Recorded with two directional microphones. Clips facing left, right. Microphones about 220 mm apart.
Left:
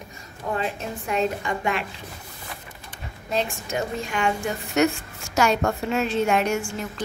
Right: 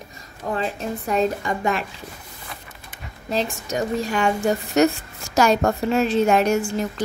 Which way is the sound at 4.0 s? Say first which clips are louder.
Right 4 dB; 40° right (ahead or behind).